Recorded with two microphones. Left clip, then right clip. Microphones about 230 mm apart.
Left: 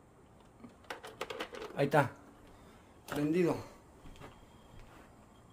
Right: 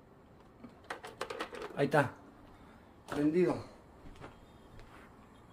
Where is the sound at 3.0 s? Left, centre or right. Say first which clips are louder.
Right 1 dB; left.